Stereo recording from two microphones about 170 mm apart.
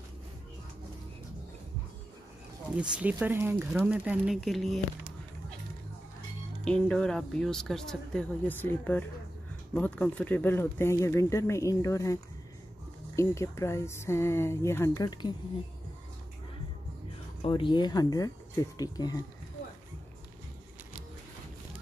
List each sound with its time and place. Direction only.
2.9 s speech: 10° right (ahead or behind)
6.6 s speech: 5° left (ahead or behind); by 15.3 s 25° left (ahead or behind)
17.4 s speech: 30° left (ahead or behind)